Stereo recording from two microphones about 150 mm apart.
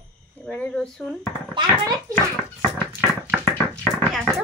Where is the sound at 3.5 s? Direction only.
10° left (ahead or behind).